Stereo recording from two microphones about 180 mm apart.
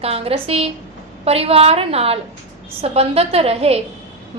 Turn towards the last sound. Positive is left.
turn(degrees=-35)  # may be behind; listen again after turning